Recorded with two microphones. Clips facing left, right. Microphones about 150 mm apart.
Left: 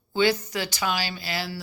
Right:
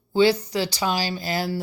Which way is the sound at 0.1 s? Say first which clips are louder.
Right 4 dB; 30° right (ahead or behind).